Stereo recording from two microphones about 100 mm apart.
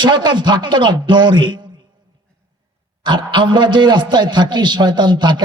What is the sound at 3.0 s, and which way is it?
A man's voice, 50° right (ahead or behind).